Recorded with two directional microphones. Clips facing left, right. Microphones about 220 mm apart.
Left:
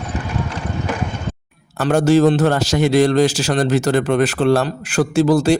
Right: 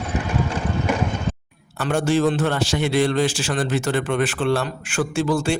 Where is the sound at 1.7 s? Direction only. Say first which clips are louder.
Left 6 dB; 40° left (ahead or behind).